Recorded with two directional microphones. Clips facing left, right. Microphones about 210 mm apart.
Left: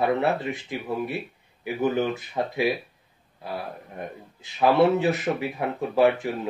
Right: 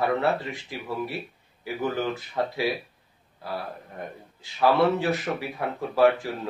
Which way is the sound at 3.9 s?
20° left (ahead or behind).